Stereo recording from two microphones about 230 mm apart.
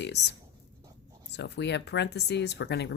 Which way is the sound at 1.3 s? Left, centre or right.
Left.